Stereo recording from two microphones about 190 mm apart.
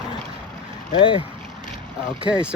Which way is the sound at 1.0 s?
25° left (ahead or behind).